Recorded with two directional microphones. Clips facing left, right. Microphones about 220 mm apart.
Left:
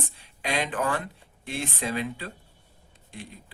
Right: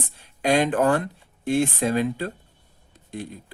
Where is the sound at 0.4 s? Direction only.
45° right (ahead or behind).